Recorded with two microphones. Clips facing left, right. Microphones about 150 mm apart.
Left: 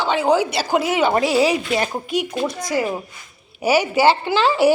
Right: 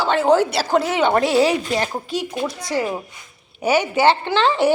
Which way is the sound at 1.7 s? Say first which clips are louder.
Left 1 dB; 10° left (ahead or behind).